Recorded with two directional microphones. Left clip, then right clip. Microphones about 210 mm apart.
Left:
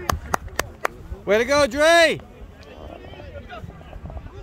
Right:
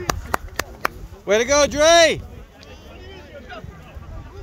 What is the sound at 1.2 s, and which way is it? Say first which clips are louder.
Speech: right 1 dB; centre (ahead or behind).